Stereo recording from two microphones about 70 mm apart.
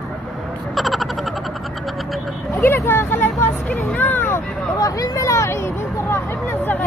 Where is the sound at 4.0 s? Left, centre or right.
Left.